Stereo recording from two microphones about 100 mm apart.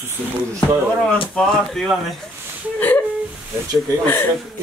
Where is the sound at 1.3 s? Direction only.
5° left (ahead or behind).